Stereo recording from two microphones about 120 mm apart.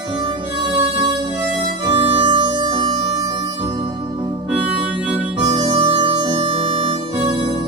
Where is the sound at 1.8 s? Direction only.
40° right (ahead or behind).